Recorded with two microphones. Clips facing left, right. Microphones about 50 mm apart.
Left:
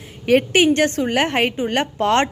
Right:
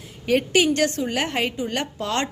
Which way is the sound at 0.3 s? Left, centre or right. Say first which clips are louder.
Left 4 dB; left.